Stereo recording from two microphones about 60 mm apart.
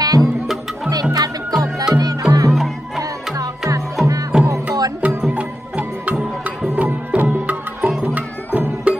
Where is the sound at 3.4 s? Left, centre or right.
Right.